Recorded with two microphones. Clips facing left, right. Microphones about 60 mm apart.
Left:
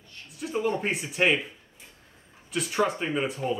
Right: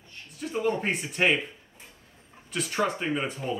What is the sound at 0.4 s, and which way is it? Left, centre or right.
Speech, centre.